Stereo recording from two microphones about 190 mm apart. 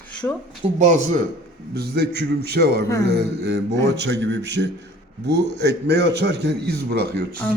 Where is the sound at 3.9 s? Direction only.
70° right (ahead or behind).